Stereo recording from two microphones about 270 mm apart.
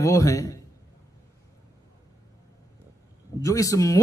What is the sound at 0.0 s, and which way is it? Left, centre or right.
Speech, centre.